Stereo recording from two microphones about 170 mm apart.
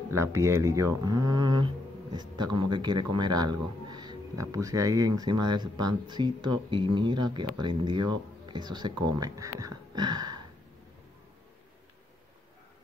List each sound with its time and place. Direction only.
0.1 s a man's voice: 15° right (ahead or behind)